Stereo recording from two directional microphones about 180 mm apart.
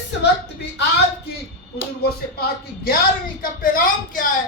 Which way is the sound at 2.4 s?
55° left (ahead or behind).